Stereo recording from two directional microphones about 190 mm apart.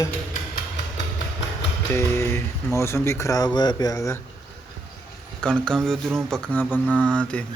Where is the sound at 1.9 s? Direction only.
15° left (ahead or behind).